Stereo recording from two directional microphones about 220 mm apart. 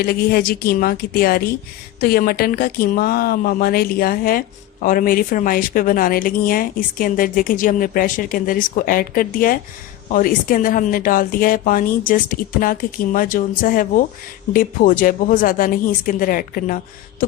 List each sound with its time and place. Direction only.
0.0 s a woman's voice: 45° left (ahead or behind)